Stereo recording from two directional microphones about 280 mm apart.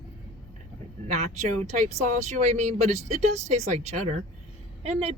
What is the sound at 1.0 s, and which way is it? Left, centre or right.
Vehicle, right.